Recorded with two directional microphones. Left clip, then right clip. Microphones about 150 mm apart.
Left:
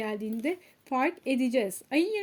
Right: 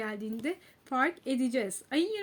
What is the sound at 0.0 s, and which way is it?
Speech, 25° left (ahead or behind).